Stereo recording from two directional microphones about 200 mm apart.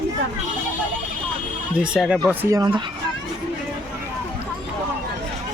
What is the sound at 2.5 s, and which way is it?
Speech, 20° right (ahead or behind).